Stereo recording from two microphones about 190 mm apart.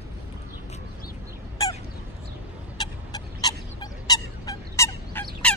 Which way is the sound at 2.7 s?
20° left (ahead or behind).